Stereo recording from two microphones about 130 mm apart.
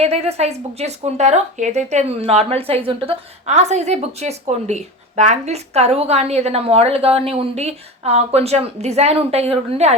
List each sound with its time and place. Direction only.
0.0 s speech: 55° right (ahead or behind)
3.5 s speech: 60° right (ahead or behind)